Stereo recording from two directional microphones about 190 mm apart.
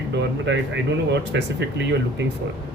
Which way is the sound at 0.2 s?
70° right (ahead or behind).